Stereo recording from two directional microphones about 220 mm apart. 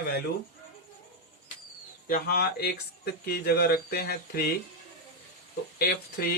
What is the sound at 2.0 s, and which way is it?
A man's voice, 45° left (ahead or behind).